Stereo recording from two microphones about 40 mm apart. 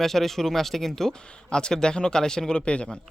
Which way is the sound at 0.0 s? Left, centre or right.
Centre.